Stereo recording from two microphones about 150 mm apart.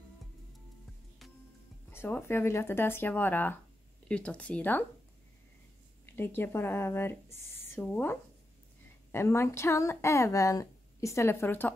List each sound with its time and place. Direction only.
1.9 s speech: 15° left (ahead or behind)
6.0 s speech: 15° left (ahead or behind)